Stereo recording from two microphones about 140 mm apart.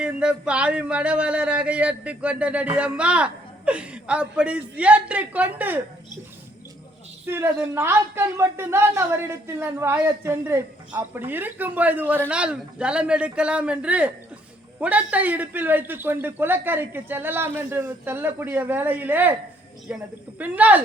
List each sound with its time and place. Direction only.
0.0 s speech: 5° right (ahead or behind)
7.3 s speech: 15° right (ahead or behind)